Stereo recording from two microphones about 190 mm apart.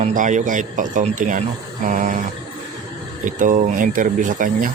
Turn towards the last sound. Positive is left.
turn(degrees=-45)  # may be behind; listen again after turning